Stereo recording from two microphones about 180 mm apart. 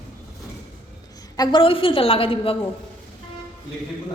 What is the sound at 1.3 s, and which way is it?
A woman's voice, 30° left (ahead or behind).